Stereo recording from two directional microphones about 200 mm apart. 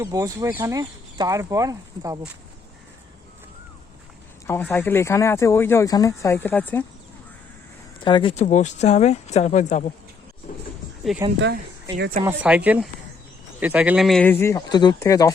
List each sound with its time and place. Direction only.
0.0 s speech: 15° right (ahead or behind)
4.4 s speech: 10° left (ahead or behind)
8.0 s speech: 25° left (ahead or behind)
11.3 s speech: 60° right (ahead or behind)
12.2 s speech: 5° right (ahead or behind); by 15.3 s 15° left (ahead or behind)